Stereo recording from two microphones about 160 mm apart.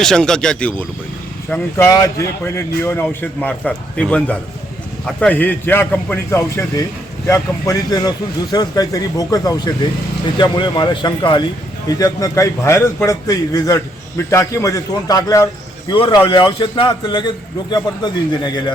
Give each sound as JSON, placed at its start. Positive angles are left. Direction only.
{"t": 0.0, "sound": "a man's voice", "side_deg": 5}